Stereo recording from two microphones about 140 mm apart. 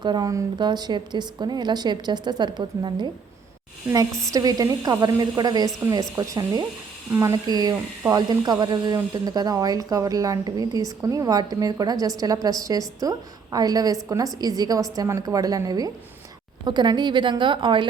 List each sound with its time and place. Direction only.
0.0 s a woman's voice: 30° right (ahead or behind)
4.3 s a woman's voice: 25° right (ahead or behind)